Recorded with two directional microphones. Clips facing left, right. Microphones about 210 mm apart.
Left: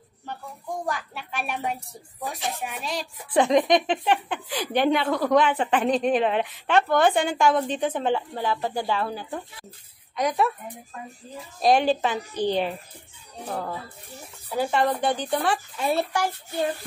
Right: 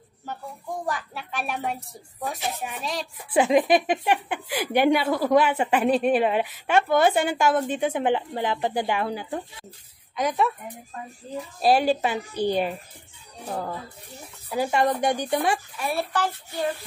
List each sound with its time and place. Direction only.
0.8 s a woman's voice: centre (ahead or behind)
10.1 s a woman's voice: centre (ahead or behind)
11.6 s speech: 5° right (ahead or behind)
14.5 s speech: 10° right (ahead or behind)
15.8 s speech: 20° left (ahead or behind)